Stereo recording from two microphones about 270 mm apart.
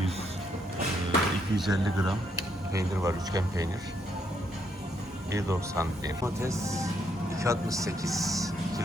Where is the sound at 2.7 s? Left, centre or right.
Centre.